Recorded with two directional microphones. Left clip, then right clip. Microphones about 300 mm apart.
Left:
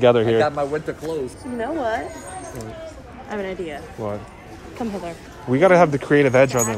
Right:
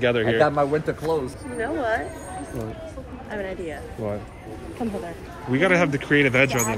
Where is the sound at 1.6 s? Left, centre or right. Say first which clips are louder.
Left 1 dB; left.